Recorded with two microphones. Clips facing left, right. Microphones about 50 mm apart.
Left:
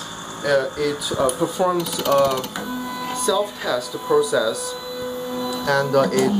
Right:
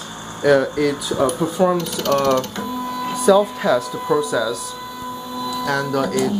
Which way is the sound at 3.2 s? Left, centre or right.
Right.